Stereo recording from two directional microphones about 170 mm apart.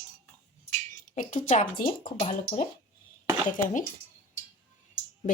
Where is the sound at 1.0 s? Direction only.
50° left (ahead or behind).